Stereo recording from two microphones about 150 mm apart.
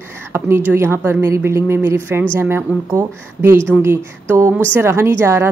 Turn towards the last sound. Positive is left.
turn(degrees=-20)  # may be behind; listen again after turning